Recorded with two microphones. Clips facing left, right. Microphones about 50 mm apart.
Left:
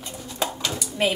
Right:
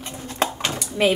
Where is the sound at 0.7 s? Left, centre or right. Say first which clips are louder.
Right 4 dB; right.